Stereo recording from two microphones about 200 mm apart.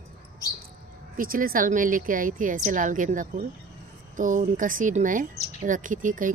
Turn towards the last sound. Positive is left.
turn(degrees=-40)  # may be behind; listen again after turning